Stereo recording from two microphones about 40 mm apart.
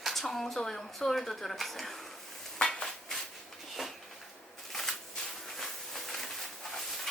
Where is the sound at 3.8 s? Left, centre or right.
Centre.